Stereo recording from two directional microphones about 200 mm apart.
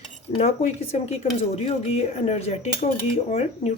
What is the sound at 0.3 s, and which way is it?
Cutlery, 35° left (ahead or behind).